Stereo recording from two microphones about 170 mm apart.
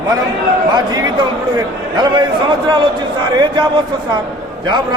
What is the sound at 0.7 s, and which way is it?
A man's voice, 25° right (ahead or behind).